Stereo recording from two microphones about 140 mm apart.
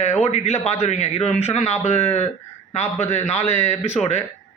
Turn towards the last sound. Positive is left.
turn(degrees=50)  # may be behind; listen again after turning